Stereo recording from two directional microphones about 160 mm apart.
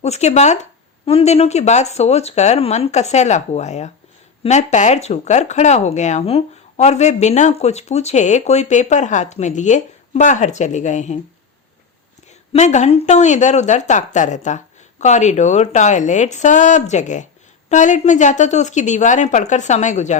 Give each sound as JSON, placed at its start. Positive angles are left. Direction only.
{"t": 0.0, "sound": "speech", "side_deg": 45}
{"t": 12.5, "sound": "speech", "side_deg": 45}